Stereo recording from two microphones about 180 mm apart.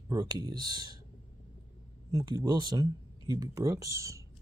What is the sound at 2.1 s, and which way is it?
Speech, 25° right (ahead or behind).